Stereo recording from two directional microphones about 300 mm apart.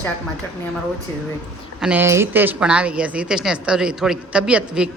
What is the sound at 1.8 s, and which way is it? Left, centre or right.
A woman's voice, centre.